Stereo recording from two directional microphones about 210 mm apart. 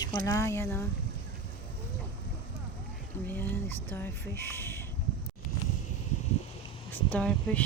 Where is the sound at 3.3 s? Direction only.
10° left (ahead or behind).